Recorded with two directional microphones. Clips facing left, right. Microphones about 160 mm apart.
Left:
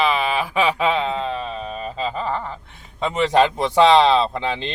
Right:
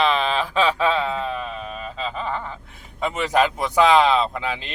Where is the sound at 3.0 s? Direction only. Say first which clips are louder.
Left 3 dB; 25° left (ahead or behind).